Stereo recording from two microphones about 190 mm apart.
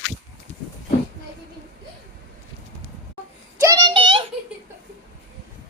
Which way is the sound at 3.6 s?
20° right (ahead or behind).